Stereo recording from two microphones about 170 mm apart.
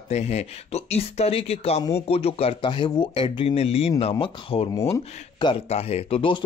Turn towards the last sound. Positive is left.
turn(degrees=30)  # may be behind; listen again after turning